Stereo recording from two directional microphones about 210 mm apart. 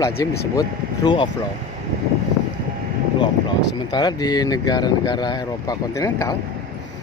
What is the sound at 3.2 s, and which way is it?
Speech, 20° left (ahead or behind).